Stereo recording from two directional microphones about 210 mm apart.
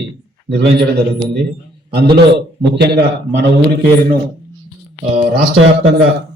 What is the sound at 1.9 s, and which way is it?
A man's voice, 50° right (ahead or behind).